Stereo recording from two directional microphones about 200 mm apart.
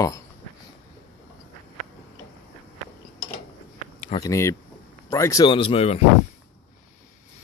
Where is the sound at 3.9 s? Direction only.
30° left (ahead or behind).